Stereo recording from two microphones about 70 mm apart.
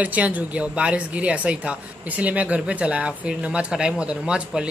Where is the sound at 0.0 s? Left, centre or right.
Right.